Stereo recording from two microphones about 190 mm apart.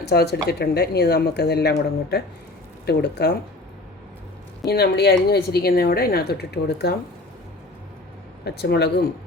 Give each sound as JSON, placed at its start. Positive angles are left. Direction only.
{"t": 0.0, "sound": "a woman's voice", "side_deg": 60}
{"t": 4.6, "sound": "a woman's voice", "side_deg": 60}
{"t": 8.4, "sound": "a woman's voice", "side_deg": 60}